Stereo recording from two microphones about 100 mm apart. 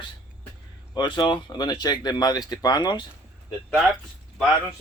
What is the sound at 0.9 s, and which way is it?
Speech, 45° left (ahead or behind).